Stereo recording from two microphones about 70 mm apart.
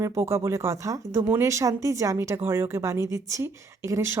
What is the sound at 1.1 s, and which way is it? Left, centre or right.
A woman's voice, right.